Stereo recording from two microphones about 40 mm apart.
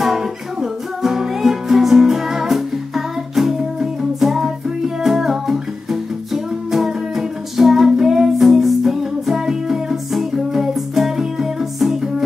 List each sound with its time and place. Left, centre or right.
0.0 s music: centre